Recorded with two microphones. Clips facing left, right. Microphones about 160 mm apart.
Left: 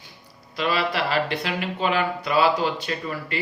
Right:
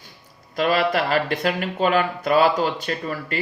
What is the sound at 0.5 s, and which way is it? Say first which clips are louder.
Speech: right 4 dB; 45° right (ahead or behind).